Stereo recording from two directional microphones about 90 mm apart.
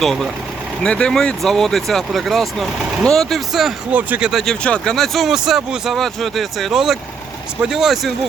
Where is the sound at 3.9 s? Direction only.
15° right (ahead or behind).